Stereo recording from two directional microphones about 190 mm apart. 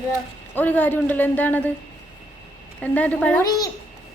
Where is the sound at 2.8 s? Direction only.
10° left (ahead or behind).